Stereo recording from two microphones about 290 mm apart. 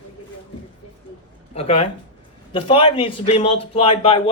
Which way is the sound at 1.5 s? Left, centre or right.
Left.